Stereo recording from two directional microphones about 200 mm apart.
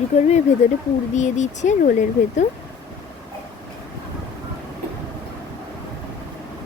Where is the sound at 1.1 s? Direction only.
35° left (ahead or behind).